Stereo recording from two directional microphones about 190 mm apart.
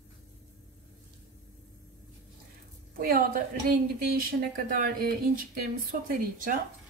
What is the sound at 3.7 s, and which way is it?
A woman's voice, 50° right (ahead or behind).